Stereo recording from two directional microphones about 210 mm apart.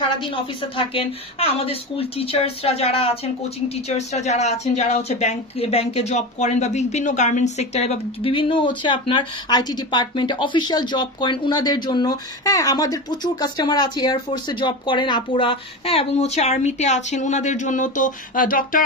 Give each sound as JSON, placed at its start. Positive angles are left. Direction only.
{"t": 0.2, "sound": "a woman's voice", "side_deg": 25}